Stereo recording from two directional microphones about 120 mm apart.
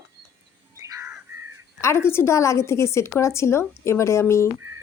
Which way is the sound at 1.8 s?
20° left (ahead or behind).